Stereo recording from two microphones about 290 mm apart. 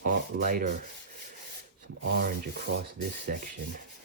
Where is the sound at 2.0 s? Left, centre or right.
Right.